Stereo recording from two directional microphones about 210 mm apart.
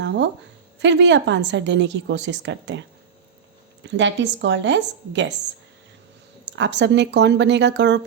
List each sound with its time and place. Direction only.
0.8 s a woman's voice: 55° right (ahead or behind)
3.8 s a woman's voice: 60° right (ahead or behind)
6.4 s a woman's voice: 55° right (ahead or behind)